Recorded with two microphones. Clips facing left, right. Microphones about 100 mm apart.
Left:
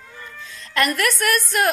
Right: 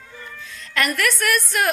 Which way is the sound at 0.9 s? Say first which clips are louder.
Left 1 dB; 35° left (ahead or behind).